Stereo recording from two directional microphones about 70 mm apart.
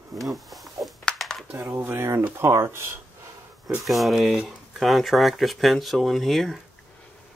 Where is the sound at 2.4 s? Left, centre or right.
Right.